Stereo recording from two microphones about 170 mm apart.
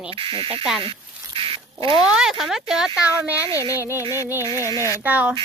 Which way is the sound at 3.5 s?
20° left (ahead or behind).